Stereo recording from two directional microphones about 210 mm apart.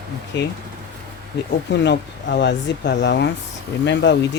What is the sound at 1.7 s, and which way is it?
Speech, 55° left (ahead or behind).